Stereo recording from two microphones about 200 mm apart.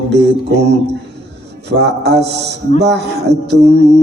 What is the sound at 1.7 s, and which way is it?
Music, 55° right (ahead or behind).